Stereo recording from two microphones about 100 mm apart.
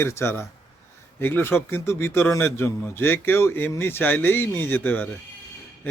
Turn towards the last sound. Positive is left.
turn(degrees=20)  # may be behind; listen again after turning